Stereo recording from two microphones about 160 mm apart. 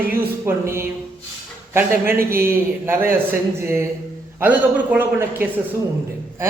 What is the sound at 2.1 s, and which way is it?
Speech, 65° right (ahead or behind).